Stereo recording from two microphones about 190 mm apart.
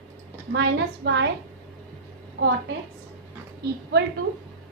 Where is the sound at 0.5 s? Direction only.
65° right (ahead or behind).